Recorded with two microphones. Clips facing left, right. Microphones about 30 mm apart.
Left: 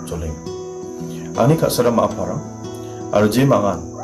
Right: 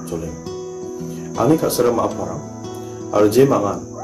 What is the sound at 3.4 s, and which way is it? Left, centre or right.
Speech, left.